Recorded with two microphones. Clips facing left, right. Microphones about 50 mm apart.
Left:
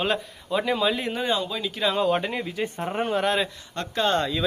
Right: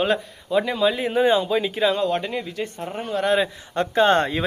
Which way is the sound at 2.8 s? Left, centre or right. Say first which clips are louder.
Left 3 dB; left.